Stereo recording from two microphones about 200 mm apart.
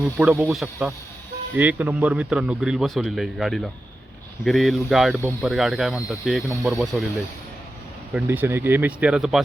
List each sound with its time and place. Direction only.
0.0 s speech: 5° right (ahead or behind)
8.1 s speech: 10° right (ahead or behind)